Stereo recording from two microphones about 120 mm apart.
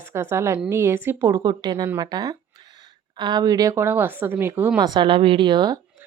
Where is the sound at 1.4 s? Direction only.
35° right (ahead or behind); by 4.7 s 15° right (ahead or behind).